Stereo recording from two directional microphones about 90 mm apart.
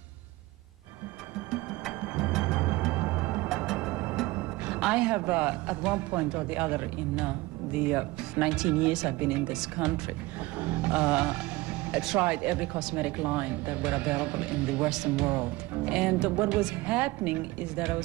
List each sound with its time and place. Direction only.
2.0 s music: 15° right (ahead or behind)
3.4 s music: 5° right (ahead or behind)
4.3 s speech: 15° right (ahead or behind)